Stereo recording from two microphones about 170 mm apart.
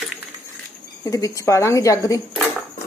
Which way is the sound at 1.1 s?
20° left (ahead or behind).